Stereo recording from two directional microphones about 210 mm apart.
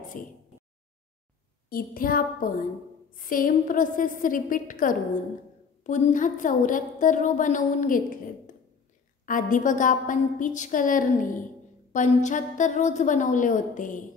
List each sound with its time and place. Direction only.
0.2 s a woman's voice: 40° left (ahead or behind)
1.7 s a sound: 45° left (ahead or behind)
3.2 s a woman's voice: 40° left (ahead or behind)
9.2 s a woman's voice: 40° left (ahead or behind)